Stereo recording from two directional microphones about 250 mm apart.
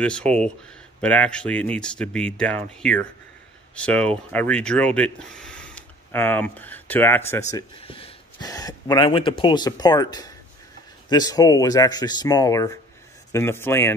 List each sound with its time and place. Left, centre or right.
0.0 s speech: centre
7.5 s speech: left